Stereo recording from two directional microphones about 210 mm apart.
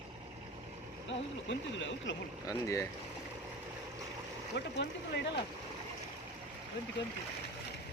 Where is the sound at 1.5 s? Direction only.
60° left (ahead or behind).